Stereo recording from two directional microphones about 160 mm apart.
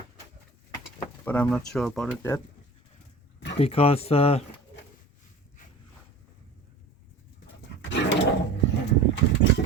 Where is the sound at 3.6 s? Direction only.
40° left (ahead or behind).